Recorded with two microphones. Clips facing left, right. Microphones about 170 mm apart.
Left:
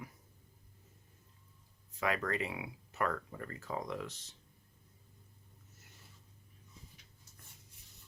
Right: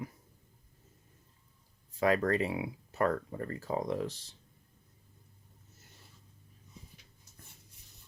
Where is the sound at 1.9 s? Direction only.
35° right (ahead or behind).